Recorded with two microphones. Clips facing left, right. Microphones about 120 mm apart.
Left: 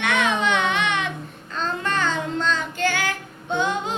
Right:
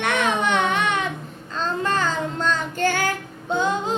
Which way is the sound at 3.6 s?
30° right (ahead or behind).